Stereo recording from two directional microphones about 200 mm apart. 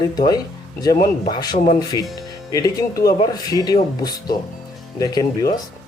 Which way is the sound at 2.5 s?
15° left (ahead or behind).